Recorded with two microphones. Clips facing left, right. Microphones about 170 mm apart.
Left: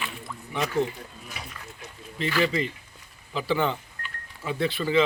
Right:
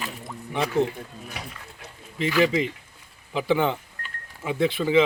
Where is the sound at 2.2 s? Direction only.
15° right (ahead or behind).